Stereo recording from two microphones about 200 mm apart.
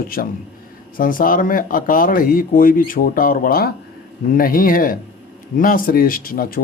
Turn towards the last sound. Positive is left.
turn(degrees=45)  # may be behind; listen again after turning